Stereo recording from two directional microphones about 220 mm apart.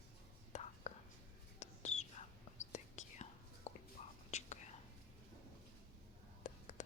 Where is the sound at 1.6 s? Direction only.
30° left (ahead or behind).